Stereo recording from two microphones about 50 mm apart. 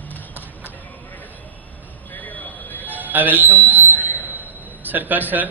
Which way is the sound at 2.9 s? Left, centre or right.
Right.